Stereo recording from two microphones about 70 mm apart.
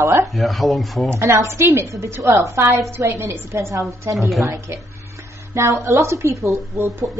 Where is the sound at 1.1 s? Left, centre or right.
Right.